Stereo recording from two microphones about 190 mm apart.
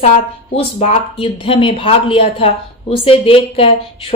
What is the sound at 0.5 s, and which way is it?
A woman's voice, 35° left (ahead or behind).